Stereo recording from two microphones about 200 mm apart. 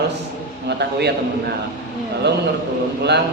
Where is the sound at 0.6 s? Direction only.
55° right (ahead or behind).